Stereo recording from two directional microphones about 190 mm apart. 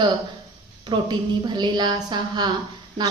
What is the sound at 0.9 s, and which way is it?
A woman's voice, 25° right (ahead or behind).